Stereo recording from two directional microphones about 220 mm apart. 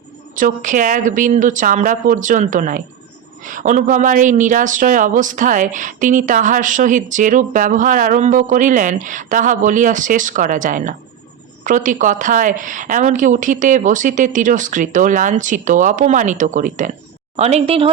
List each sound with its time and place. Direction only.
0.3 s a woman's voice: 35° right (ahead or behind)